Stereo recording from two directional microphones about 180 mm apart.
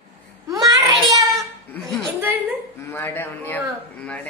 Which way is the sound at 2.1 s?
10° right (ahead or behind).